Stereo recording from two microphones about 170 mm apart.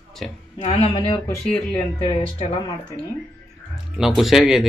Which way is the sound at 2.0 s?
30° left (ahead or behind).